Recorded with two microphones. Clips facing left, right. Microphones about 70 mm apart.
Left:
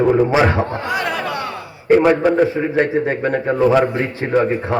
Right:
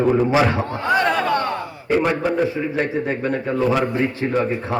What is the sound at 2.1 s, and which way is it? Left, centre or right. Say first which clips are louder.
A man's voice: left 6 dB; left.